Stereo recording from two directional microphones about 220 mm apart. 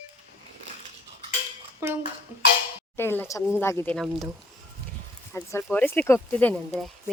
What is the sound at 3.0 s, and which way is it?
Speech, 10° left (ahead or behind).